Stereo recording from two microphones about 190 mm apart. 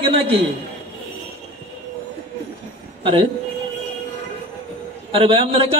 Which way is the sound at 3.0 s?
30° right (ahead or behind).